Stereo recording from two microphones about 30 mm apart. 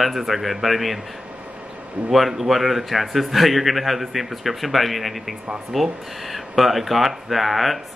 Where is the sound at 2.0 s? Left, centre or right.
Centre.